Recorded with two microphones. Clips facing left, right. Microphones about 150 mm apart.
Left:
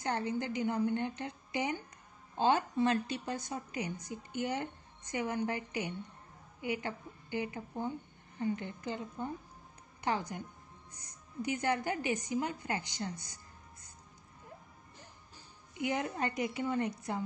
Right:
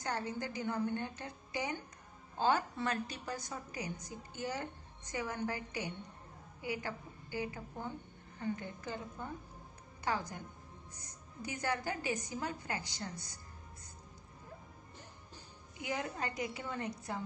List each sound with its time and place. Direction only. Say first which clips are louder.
0.0 s a woman's voice: left 4 dB; 20° left (ahead or behind)
11.4 s a woman's voice: left 4 dB; 20° left (ahead or behind)
15.8 s a woman's voice: left 5 dB; 20° left (ahead or behind)